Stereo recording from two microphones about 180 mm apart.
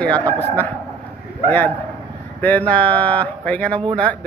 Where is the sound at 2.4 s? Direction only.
10° left (ahead or behind).